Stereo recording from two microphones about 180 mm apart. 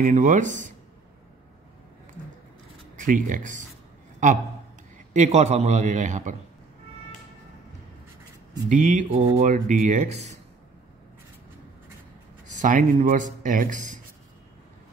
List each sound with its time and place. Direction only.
0.0 s speech: 40° right (ahead or behind)
3.0 s a man's voice: 45° right (ahead or behind)
8.6 s speech: 45° right (ahead or behind)
12.4 s speech: 45° right (ahead or behind)